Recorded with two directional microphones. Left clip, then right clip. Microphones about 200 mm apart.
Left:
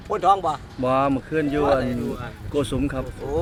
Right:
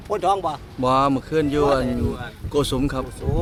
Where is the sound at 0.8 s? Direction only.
20° right (ahead or behind).